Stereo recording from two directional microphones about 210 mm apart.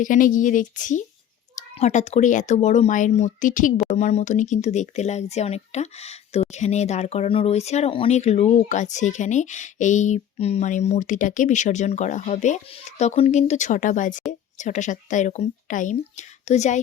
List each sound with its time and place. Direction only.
0.0 s speech: 40° left (ahead or behind)